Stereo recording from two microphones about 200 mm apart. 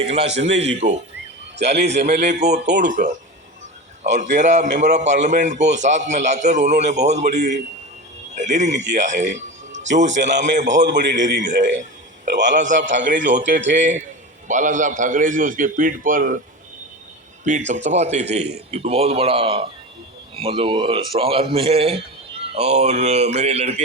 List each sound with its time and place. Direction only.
0.1 s a man's voice: 30° right (ahead or behind)
1.5 s a man's voice: 55° right (ahead or behind)
1.9 s a man's voice: 35° right (ahead or behind)
13.6 s a man's voice: 65° right (ahead or behind)
14.4 s a man's voice: 40° right (ahead or behind)
17.4 s a man's voice: 40° right (ahead or behind)